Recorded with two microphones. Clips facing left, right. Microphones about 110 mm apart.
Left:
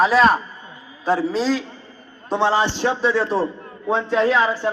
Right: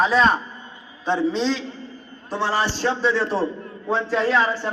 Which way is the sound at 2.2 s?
20° left (ahead or behind).